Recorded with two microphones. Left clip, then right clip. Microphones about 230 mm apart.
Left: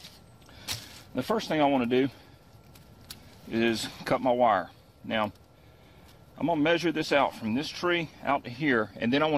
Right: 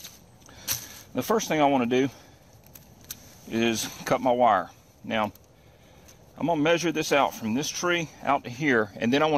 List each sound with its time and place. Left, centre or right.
1.1 s speech: right
3.4 s speech: right
6.3 s speech: right